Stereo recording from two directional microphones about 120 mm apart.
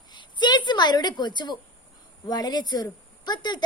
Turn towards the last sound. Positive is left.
turn(degrees=35)  # may be behind; listen again after turning